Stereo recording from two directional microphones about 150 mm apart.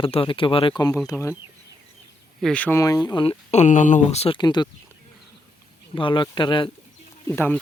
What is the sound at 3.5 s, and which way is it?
Speech, 50° left (ahead or behind).